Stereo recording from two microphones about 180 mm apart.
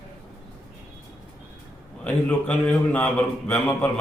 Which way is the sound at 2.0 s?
5° left (ahead or behind).